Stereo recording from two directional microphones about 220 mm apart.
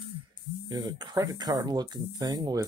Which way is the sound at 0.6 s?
20° right (ahead or behind).